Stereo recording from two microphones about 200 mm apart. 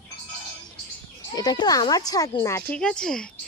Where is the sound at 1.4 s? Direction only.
20° left (ahead or behind).